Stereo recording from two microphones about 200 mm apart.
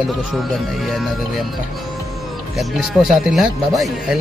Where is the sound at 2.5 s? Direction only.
Centre (ahead or behind).